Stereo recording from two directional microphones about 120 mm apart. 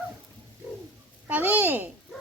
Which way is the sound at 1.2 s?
15° right (ahead or behind).